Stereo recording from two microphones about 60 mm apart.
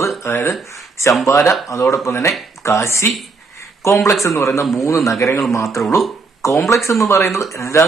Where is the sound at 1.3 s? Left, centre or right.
Left.